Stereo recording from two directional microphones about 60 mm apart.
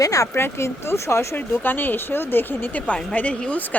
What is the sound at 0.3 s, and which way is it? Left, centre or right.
Speech, left.